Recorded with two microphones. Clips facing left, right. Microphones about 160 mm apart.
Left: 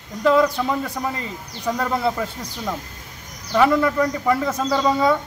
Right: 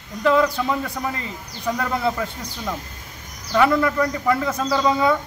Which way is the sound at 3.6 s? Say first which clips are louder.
Left 2 dB; 10° left (ahead or behind).